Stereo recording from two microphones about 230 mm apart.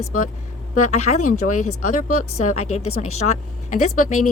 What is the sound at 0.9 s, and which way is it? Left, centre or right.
Speech, left.